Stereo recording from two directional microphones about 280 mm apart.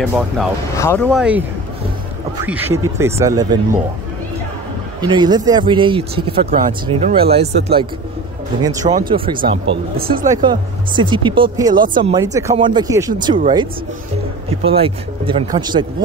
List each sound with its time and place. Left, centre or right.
0.0 s speech: centre
1.0 s speech: centre
2.4 s speech: centre
5.0 s speech: centre
9.4 s speech: right
10.0 s speech: centre
14.6 s speech: centre